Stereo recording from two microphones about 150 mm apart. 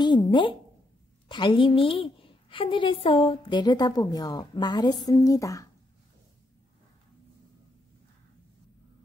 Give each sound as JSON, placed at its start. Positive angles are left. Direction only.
{"t": 0.0, "sound": "a woman's voice", "side_deg": 30}